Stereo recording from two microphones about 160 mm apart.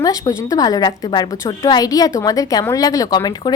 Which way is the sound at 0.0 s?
20° left (ahead or behind).